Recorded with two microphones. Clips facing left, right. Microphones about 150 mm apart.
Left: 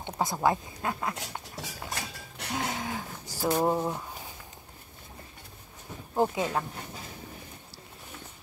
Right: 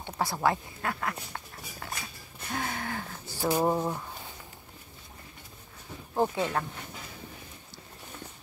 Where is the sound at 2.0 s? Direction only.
80° left.